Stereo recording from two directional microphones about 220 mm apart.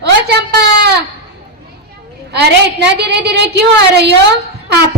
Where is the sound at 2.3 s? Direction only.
50° right (ahead or behind).